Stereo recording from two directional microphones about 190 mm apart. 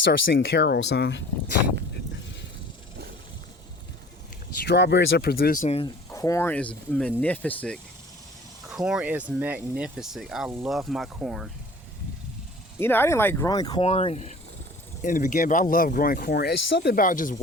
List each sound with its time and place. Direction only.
0.3 s speech: 60° left (ahead or behind)
4.6 s speech: 60° left (ahead or behind)
5.6 s speech: 30° left (ahead or behind)
6.1 s speech: 15° left (ahead or behind)
8.7 s speech: 5° right (ahead or behind)
12.8 s speech: 10° left (ahead or behind)
13.8 s speech: 30° left (ahead or behind); by 16.9 s 65° left (ahead or behind)
16.9 s speech: 45° left (ahead or behind)